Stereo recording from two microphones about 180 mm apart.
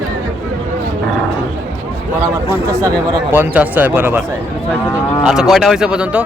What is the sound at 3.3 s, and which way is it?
Speech, 10° right (ahead or behind).